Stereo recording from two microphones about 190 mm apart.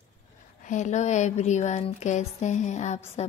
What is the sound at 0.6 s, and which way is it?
Speech, 40° left (ahead or behind).